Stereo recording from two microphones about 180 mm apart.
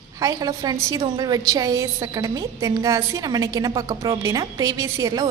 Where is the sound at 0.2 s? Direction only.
20° right (ahead or behind).